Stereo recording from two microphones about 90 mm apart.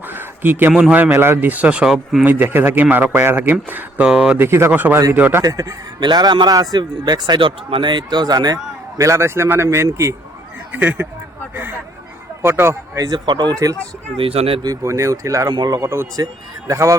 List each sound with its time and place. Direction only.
0.1 s a sound: 20° right (ahead or behind)
0.8 s speech: 15° right (ahead or behind)
2.2 s speech: 20° right (ahead or behind)
4.0 s speech: 10° right (ahead or behind)
4.4 s speech: 25° right (ahead or behind)
5.4 s a man's voice: 40° right (ahead or behind)
6.0 s a man's voice: 55° right (ahead or behind)
9.0 s a man's voice: 35° right (ahead or behind)
10.7 s speech: 20° right (ahead or behind)
12.4 s speech: 25° right (ahead or behind)
13.1 s a man's voice: 55° right (ahead or behind)
14.2 s speech: 90° right
14.6 s a man's voice: 40° right (ahead or behind)
15.5 s a man's voice: 50° right (ahead or behind)